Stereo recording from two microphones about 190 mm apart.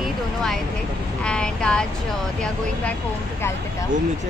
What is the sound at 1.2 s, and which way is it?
Speech, 5° left (ahead or behind).